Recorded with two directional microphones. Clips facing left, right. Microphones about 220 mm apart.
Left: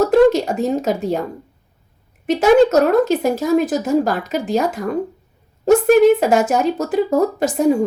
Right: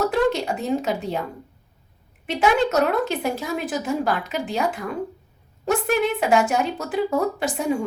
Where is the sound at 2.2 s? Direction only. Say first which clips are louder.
Left 9 dB; 45° left (ahead or behind).